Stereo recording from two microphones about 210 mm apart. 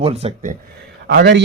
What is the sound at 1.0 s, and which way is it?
Speech, 55° right (ahead or behind).